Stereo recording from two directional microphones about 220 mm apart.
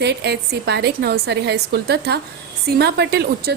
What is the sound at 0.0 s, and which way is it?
Speech, 50° right (ahead or behind).